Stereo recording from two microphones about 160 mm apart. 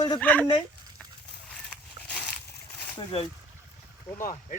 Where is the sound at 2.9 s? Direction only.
35° left (ahead or behind).